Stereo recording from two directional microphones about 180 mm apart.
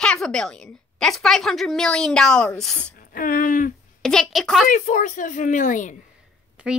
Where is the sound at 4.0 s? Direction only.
5° left (ahead or behind).